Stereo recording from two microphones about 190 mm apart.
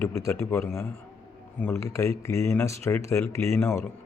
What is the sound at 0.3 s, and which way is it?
A man's voice, 15° left (ahead or behind).